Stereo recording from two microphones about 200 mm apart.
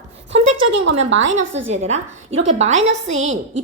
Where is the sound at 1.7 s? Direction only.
35° right (ahead or behind).